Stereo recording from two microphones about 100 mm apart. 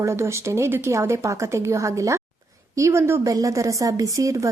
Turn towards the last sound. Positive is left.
turn(degrees=-30)  # may be behind; listen again after turning